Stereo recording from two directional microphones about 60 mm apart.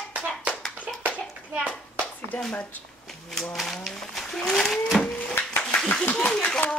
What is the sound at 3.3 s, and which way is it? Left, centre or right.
Speech, centre.